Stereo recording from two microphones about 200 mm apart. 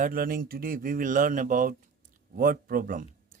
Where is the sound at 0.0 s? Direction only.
45° right (ahead or behind).